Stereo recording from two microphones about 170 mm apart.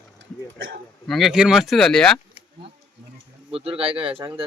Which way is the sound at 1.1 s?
Centre (ahead or behind).